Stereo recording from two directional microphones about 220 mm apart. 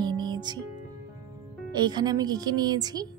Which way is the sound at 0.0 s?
20° right (ahead or behind).